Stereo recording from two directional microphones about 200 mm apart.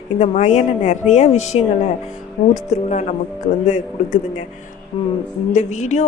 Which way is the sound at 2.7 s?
35° left (ahead or behind).